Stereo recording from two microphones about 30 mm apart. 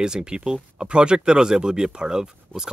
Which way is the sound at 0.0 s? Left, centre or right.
Right.